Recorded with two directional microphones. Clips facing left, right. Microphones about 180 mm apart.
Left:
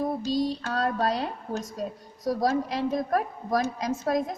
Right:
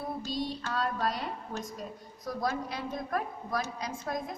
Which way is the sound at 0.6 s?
40° left (ahead or behind).